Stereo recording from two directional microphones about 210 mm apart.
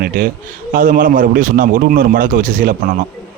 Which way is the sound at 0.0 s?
45° right (ahead or behind).